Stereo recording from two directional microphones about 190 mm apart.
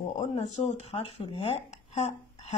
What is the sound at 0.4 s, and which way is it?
Speech, 35° left (ahead or behind).